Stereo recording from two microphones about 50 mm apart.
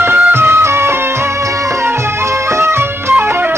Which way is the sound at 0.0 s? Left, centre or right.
Right.